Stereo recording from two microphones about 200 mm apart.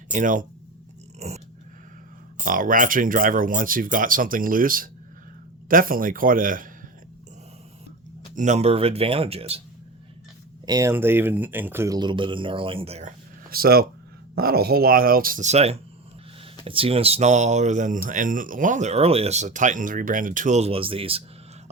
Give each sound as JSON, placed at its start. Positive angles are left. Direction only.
{"t": 0.1, "sound": "speech", "side_deg": -40}
{"t": 2.4, "sound": "speech", "side_deg": -40}
{"t": 8.4, "sound": "speech", "side_deg": -35}
{"t": 10.7, "sound": "speech", "side_deg": -15}